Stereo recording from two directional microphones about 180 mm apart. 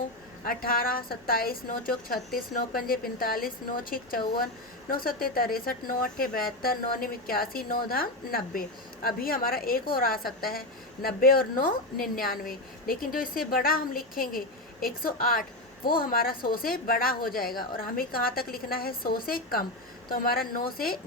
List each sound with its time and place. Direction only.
0.4 s a woman's voice: 55° left (ahead or behind)